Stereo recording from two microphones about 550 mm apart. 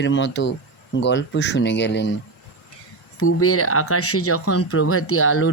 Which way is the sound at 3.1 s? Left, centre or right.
Left.